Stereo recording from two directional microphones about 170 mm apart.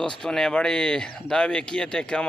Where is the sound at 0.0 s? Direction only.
5° left (ahead or behind).